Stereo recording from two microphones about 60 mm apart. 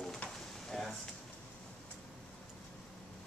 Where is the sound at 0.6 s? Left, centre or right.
Centre.